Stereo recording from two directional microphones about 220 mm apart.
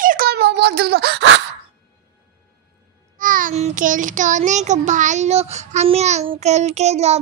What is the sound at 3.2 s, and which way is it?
A child's voice, 40° right (ahead or behind).